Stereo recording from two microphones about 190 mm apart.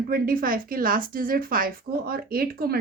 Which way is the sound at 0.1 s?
50° right (ahead or behind).